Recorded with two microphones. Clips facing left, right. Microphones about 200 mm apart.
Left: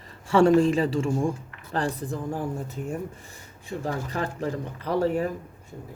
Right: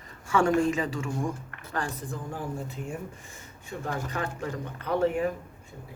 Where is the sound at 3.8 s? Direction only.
35° left (ahead or behind).